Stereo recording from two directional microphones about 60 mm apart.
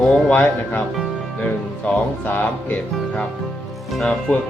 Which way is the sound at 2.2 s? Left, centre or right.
Left.